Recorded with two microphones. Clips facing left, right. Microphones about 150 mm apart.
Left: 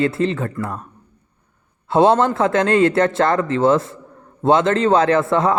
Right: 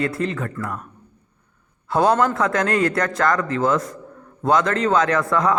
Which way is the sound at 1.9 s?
25° left (ahead or behind).